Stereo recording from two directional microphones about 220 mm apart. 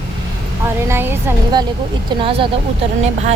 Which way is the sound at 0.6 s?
10° right (ahead or behind).